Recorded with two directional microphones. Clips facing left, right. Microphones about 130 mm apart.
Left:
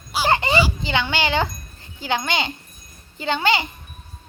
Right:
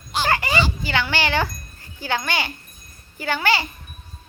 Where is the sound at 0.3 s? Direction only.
25° left (ahead or behind).